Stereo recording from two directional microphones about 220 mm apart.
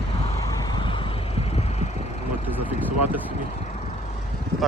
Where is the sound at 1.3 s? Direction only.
25° left (ahead or behind).